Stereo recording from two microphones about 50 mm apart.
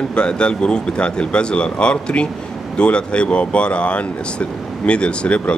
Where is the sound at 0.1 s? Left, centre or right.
Left.